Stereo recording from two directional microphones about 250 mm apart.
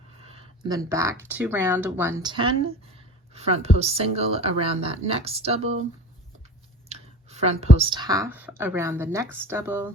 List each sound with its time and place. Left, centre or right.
0.3 s a sound: right
0.9 s a woman's voice: centre
6.8 s speech: right; by 9.9 s centre